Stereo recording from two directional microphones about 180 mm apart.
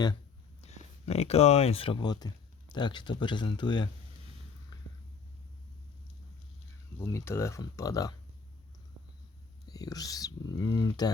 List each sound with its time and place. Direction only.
0.6 s speech: 35° left (ahead or behind)
4.7 s a sound: 25° left (ahead or behind)
7.0 s speech: 15° left (ahead or behind)
9.6 s speech: 20° left (ahead or behind)